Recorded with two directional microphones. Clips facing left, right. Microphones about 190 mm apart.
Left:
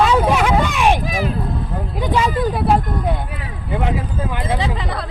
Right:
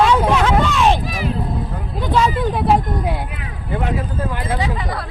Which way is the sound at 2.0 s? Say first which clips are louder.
Right 1 dB; 10° left (ahead or behind).